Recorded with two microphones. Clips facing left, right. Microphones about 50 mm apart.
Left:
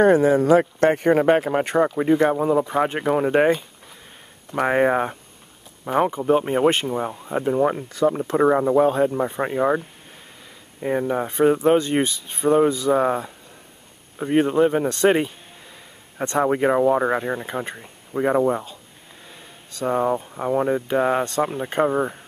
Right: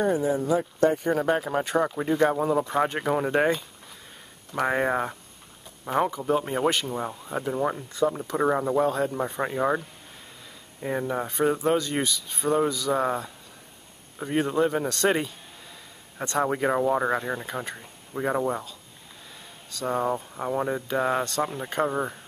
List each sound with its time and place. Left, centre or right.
0.0 s speech: left
0.7 s speech: left
1.2 s speech: left
2.0 s speech: left
2.3 s speech: centre
4.6 s speech: left
5.9 s speech: centre
6.9 s speech: centre
8.8 s speech: left
9.1 s speech: centre
19.9 s speech: centre